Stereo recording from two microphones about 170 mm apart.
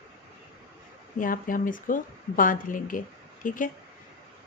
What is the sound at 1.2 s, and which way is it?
A woman's voice, 55° left (ahead or behind).